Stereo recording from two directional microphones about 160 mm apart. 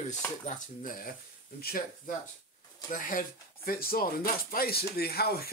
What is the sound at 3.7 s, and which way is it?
Speech, 65° left (ahead or behind).